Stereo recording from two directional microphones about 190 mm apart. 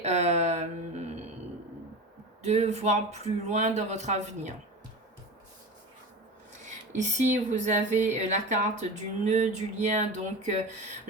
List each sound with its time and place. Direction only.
0.0 s a sound: 35° right (ahead or behind)
2.4 s speech: 35° right (ahead or behind)
6.7 s speech: 40° right (ahead or behind)